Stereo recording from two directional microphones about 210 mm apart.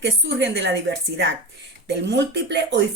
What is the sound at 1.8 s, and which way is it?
Speech, 55° right (ahead or behind).